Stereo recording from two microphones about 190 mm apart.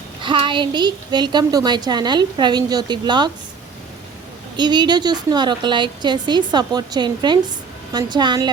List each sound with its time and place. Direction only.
0.2 s a woman's voice: 25° right (ahead or behind)
4.5 s a woman's voice: 25° right (ahead or behind)